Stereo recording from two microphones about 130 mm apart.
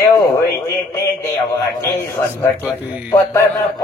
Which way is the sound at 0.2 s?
20° left (ahead or behind).